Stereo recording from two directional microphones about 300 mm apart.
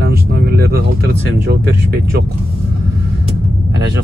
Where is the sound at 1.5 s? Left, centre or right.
Right.